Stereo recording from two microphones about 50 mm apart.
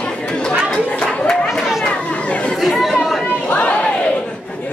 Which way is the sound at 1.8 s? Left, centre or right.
Left.